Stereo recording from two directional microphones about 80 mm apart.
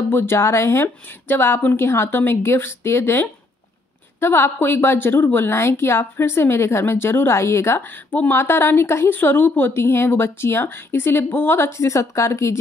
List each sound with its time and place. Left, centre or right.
0.1 s a woman's voice: left